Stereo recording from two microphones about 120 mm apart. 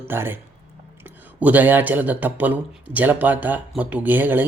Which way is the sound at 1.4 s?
15° right (ahead or behind).